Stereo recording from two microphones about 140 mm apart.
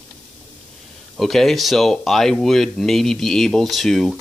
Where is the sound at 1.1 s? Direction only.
Centre (ahead or behind).